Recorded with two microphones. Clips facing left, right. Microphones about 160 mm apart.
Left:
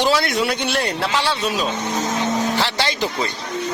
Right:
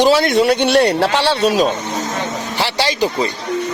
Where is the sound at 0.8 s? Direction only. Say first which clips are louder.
Right 9 dB; 35° right (ahead or behind).